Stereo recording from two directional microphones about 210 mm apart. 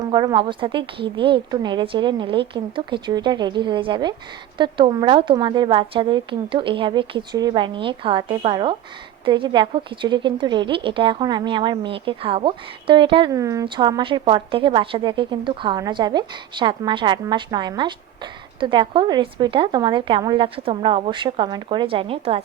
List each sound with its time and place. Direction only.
0.0 s a woman's voice: 20° right (ahead or behind)